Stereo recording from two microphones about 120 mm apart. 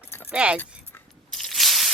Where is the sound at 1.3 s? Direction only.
Centre (ahead or behind).